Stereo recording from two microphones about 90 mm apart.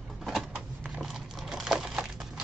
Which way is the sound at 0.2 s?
Centre (ahead or behind).